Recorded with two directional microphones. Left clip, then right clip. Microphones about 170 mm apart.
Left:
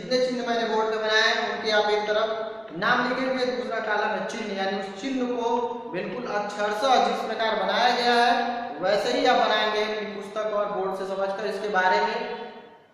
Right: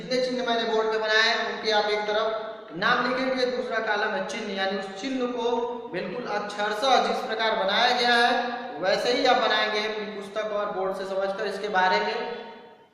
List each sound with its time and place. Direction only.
0.1 s a sound: 15° right (ahead or behind)
2.8 s a man's voice: 15° right (ahead or behind)
6.3 s a man's voice: 15° right (ahead or behind)
11.7 s a man's voice: 15° right (ahead or behind)